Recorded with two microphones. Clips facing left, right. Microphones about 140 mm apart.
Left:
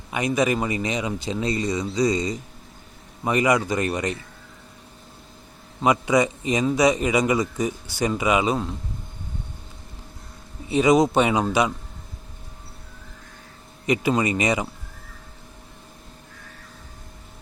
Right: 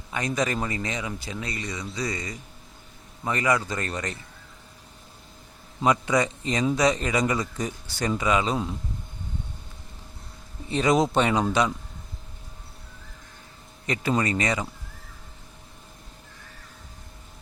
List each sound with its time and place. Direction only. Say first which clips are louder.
0.1 s speech: left 5 dB; 10° left (ahead or behind)
5.8 s speech: left 3 dB; 5° left (ahead or behind)
10.7 s speech: left 4 dB; 5° left (ahead or behind)
13.8 s speech: left 4 dB; 15° left (ahead or behind)